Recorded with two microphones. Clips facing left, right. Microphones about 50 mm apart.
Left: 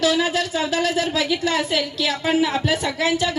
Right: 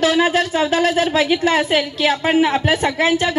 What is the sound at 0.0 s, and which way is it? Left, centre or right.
A woman's voice, right.